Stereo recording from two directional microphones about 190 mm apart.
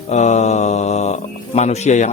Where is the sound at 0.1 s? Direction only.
35° left (ahead or behind).